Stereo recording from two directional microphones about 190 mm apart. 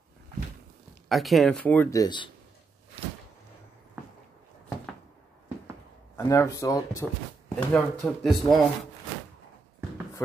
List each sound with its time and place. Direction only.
1.0 s speech: centre (ahead or behind); by 2.3 s 25° left (ahead or behind)
6.1 s speech: 15° left (ahead or behind)
8.0 s a man's voice: centre (ahead or behind)